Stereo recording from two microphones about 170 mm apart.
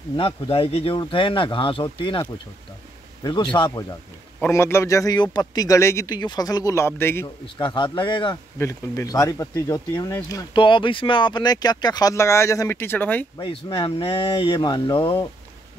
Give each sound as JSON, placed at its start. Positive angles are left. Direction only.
{"t": 0.1, "sound": "speech", "side_deg": 30}
{"t": 3.5, "sound": "speech", "side_deg": 25}
{"t": 4.4, "sound": "speech", "side_deg": 15}
{"t": 7.6, "sound": "speech", "side_deg": 25}
{"t": 13.4, "sound": "speech", "side_deg": 30}